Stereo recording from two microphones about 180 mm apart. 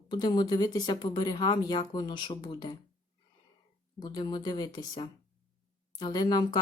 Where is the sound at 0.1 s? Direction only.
25° left (ahead or behind).